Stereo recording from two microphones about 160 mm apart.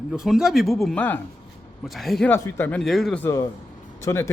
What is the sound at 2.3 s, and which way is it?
Speech, 10° left (ahead or behind).